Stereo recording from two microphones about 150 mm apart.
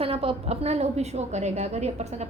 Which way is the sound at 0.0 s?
40° right (ahead or behind).